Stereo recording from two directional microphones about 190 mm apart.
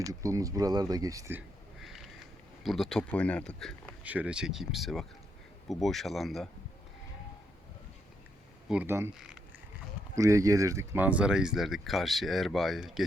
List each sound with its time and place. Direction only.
0.1 s speech: 15° right (ahead or behind)
1.8 s a sound: centre (ahead or behind)
2.6 s speech: centre (ahead or behind)
4.0 s speech: 10° right (ahead or behind)
8.7 s speech: 10° right (ahead or behind)
10.2 s speech: 15° right (ahead or behind); by 13.1 s centre (ahead or behind)